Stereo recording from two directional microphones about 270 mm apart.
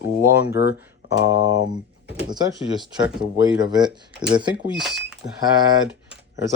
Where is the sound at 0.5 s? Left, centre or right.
Left.